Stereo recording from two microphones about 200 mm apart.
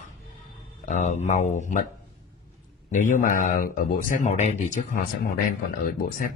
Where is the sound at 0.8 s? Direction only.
40° left (ahead or behind).